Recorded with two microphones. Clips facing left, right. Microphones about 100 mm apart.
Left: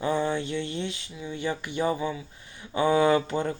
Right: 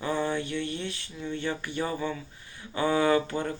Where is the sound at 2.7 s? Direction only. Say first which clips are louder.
Left 3 dB; 20° left (ahead or behind).